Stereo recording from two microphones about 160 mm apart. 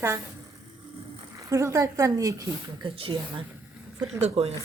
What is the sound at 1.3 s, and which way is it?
Speech, 20° right (ahead or behind).